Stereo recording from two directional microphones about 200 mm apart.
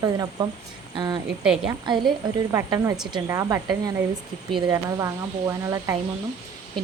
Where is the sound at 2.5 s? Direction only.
15° right (ahead or behind).